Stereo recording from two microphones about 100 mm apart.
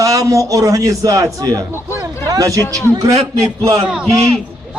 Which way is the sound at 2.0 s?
35° right (ahead or behind).